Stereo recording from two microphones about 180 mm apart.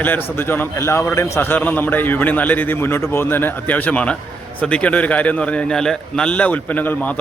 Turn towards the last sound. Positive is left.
turn(degrees=10)  # may be behind; listen again after turning